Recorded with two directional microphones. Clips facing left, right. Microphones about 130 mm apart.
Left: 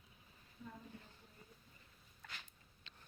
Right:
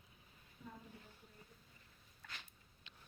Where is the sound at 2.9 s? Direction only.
15° right (ahead or behind).